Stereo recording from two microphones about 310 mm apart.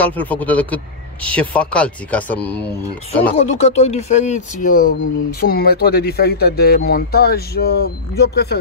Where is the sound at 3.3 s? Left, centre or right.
Left.